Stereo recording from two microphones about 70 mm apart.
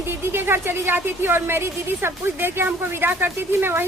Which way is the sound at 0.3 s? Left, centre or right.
Right.